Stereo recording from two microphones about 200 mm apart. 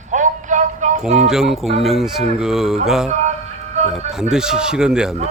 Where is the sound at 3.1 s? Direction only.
35° right (ahead or behind).